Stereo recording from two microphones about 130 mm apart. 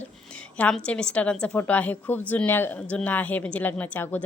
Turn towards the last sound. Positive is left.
turn(degrees=15)  # may be behind; listen again after turning